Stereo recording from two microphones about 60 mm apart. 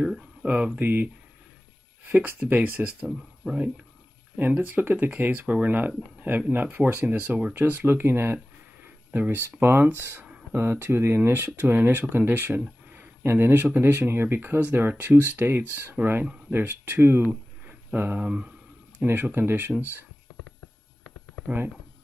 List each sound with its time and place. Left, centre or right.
0.0 s a sound: centre
0.5 s speech: centre
0.7 s speech: right
4.4 s speech: right